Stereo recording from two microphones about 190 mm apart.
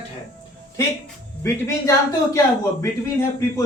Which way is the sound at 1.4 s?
15° left (ahead or behind).